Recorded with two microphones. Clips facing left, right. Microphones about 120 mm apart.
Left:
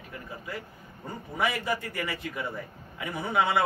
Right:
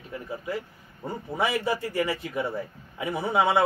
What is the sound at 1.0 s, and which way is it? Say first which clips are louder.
Speech: right 2 dB; 30° right (ahead or behind).